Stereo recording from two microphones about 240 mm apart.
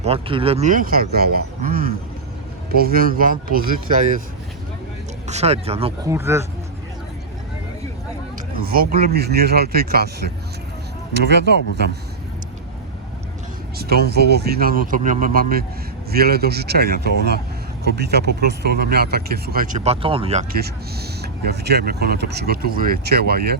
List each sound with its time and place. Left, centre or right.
0.0 s speech: right
5.3 s speech: right
6.1 s speech: centre
8.6 s speech: right
13.7 s speech: right
20.5 s speech: right